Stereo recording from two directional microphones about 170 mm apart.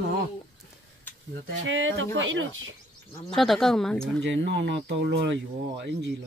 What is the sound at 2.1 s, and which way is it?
Speech, 90° right.